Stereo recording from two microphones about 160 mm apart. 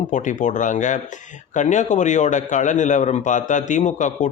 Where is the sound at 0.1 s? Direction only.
50° left (ahead or behind).